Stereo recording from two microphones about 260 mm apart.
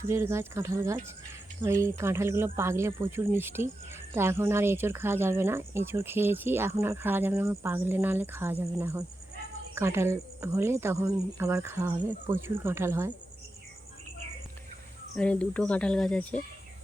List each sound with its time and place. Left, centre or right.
0.1 s speech: centre
15.1 s speech: centre